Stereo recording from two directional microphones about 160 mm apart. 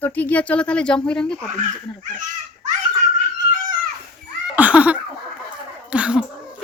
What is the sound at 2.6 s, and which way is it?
Giggle, 50° right (ahead or behind).